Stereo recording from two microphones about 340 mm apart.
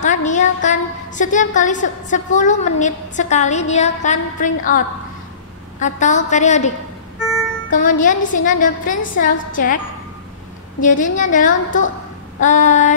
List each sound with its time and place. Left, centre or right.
0.0 s a woman's voice: left
7.7 s a woman's voice: left
10.8 s a woman's voice: left